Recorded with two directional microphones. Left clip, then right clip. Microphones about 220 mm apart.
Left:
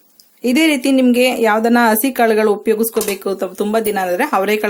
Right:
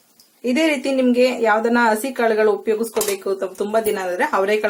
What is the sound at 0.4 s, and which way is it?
Speech, 45° left (ahead or behind).